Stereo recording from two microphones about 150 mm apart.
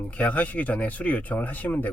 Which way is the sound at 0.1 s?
10° left (ahead or behind).